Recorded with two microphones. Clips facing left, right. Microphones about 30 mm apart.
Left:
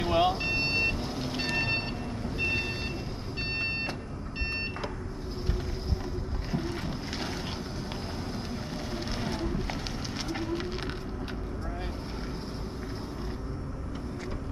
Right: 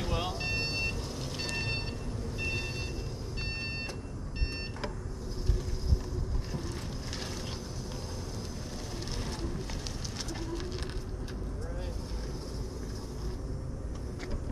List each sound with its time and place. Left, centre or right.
0.0 s vehicle: left
4.4 s beep: left
6.5 s vehicle: left
9.1 s vehicle: left